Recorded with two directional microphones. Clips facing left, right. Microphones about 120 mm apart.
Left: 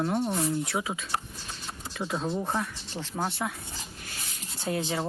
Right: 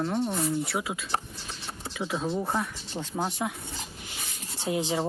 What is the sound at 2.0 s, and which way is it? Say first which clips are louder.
Speech: right 1 dB; centre (ahead or behind).